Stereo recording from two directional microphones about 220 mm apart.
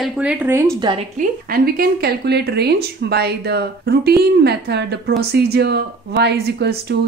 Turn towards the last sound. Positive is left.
turn(degrees=-50)  # may be behind; listen again after turning